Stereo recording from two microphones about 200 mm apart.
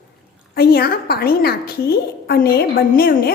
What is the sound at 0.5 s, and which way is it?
A woman's voice, 50° left (ahead or behind).